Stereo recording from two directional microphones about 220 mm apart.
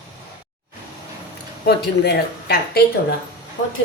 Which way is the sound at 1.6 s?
45° left (ahead or behind).